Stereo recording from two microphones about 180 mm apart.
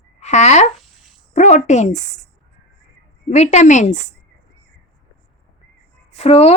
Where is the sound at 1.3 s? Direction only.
45° left (ahead or behind).